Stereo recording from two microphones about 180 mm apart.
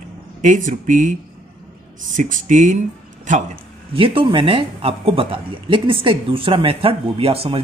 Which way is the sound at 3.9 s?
30° right (ahead or behind).